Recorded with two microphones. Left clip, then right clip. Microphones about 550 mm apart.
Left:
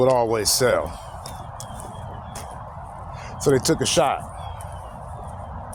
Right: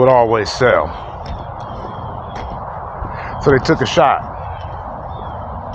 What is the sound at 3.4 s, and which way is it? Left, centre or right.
Speech, left.